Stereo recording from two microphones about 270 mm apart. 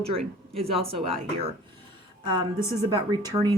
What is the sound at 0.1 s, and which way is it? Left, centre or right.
Speech, right.